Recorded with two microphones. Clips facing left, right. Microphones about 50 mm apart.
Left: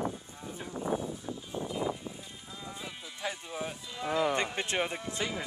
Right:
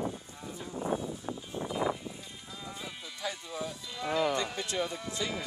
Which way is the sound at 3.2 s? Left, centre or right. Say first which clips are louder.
Left 1 dB; left.